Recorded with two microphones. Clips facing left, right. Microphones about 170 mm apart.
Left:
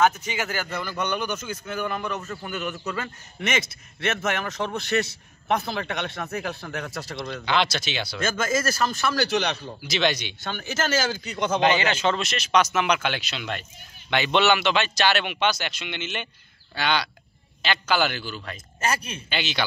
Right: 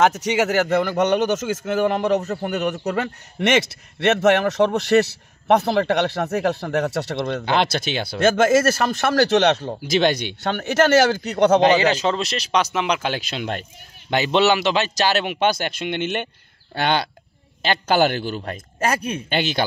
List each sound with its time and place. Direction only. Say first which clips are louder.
0.0 s a man's voice: right 5 dB; 80° right
11.6 s a man's voice: right 5 dB; 35° right (ahead or behind)
14.1 s a man's voice: right 4 dB; 35° right (ahead or behind); by 19.6 s 50° right (ahead or behind)